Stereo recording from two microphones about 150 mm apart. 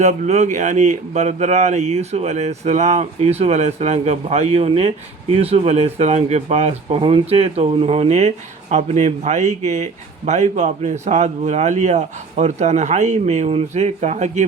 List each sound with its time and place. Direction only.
0.0 s speech: 50° right (ahead or behind)